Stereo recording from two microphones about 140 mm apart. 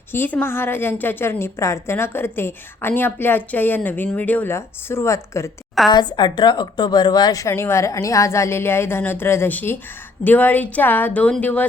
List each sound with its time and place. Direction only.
0.1 s a woman's voice: 15° left (ahead or behind)
5.9 s a woman's voice: 30° left (ahead or behind); by 11.6 s 10° left (ahead or behind)